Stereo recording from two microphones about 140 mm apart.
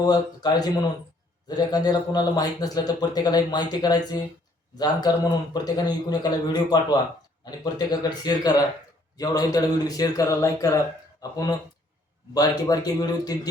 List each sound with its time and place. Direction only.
0.0 s a man's voice: 30° left (ahead or behind)